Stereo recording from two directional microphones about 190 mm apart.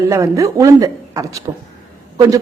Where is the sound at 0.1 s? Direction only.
15° right (ahead or behind).